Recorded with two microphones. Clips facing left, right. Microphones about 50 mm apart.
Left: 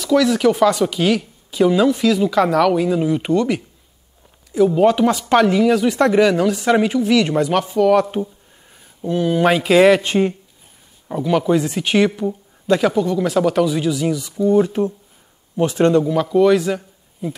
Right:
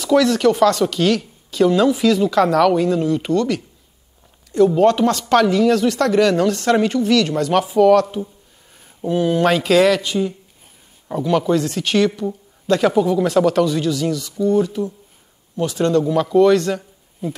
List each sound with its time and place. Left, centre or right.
0.0 s speech: centre
4.5 s speech: centre
6.3 s speech: centre
7.5 s speech: centre
8.2 s speech: left
9.0 s speech: centre
9.4 s speech: centre
10.0 s speech: left
11.1 s speech: centre
12.9 s speech: centre; by 14.7 s left
14.7 s speech: left
15.6 s speech: left
16.0 s a man's voice: centre